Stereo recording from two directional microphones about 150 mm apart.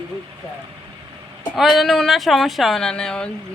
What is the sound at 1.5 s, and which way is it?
Speech, centre (ahead or behind).